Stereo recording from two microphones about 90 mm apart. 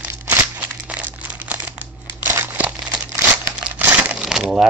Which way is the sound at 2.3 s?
20° right (ahead or behind).